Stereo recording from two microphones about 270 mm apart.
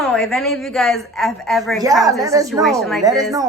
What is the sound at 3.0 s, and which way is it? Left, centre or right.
Speech, centre.